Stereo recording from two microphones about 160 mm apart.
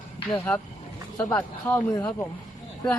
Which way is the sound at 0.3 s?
10° left (ahead or behind).